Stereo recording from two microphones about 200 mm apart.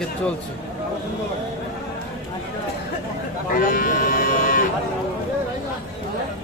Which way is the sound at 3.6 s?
45° left (ahead or behind).